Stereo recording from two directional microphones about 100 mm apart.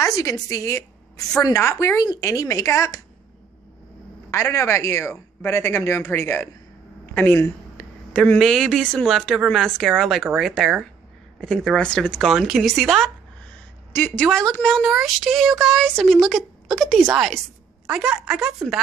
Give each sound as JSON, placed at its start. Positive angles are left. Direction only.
{"t": 0.0, "sound": "a woman's voice", "side_deg": 35}
{"t": 4.3, "sound": "speech", "side_deg": 30}
{"t": 13.9, "sound": "a woman's voice", "side_deg": 15}